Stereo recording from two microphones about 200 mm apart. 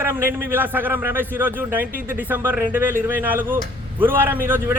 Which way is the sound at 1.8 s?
45° right (ahead or behind).